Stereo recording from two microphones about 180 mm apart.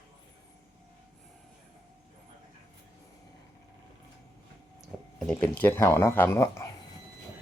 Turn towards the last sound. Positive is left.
turn(degrees=15)  # may be behind; listen again after turning